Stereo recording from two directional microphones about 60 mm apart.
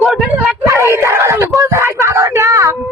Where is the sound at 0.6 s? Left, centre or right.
Right.